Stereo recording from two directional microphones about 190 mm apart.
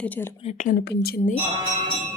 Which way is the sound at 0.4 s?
40° left (ahead or behind).